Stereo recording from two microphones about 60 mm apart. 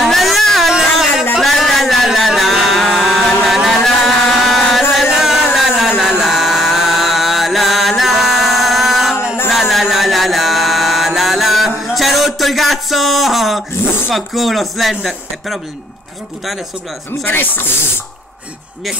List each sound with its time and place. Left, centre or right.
0.0 s cat: centre
0.7 s music: centre
1.4 s a sound: centre
9.5 s mantra: centre
13.8 s a sound: left
14.1 s speech: centre
17.3 s speech: left